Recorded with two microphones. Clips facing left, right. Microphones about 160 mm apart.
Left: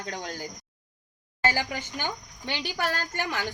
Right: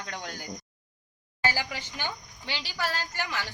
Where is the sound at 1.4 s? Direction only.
50° left (ahead or behind).